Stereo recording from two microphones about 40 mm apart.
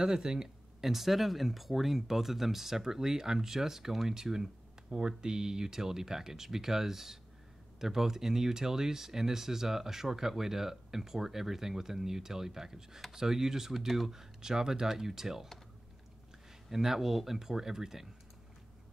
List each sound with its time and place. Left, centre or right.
0.0 s speech: centre
0.8 s speech: centre
16.7 s speech: centre